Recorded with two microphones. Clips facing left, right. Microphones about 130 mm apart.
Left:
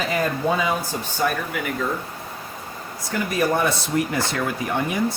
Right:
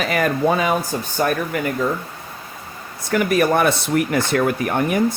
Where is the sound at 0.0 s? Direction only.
75° right (ahead or behind).